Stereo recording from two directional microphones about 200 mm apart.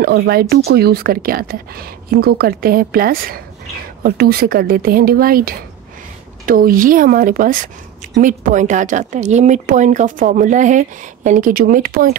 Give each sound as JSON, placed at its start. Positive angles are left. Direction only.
{"t": 0.0, "sound": "a woman's voice", "side_deg": -50}